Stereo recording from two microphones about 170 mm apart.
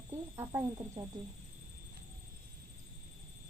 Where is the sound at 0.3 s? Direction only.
15° right (ahead or behind).